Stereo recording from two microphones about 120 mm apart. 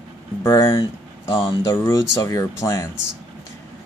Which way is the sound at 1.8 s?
25° left (ahead or behind).